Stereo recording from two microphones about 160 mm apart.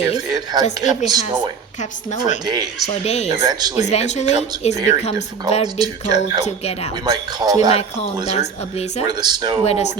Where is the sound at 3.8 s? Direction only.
45° left (ahead or behind).